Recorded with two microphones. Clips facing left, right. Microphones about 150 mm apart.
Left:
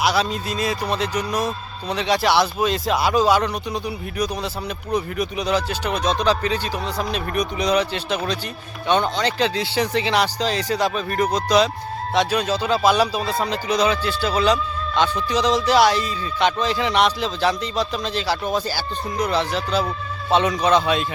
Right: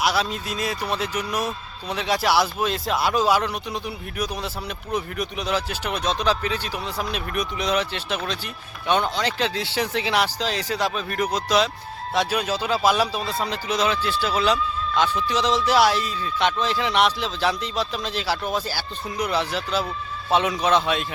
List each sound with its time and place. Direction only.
0.0 s speech: centre (ahead or behind)